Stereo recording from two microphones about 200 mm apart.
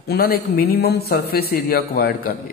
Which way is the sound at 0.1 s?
50° left (ahead or behind).